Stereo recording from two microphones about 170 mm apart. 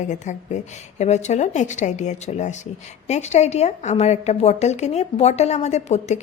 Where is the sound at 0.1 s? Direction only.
45° left (ahead or behind).